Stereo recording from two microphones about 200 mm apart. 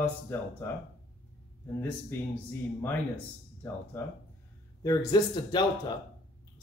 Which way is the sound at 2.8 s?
10° left (ahead or behind).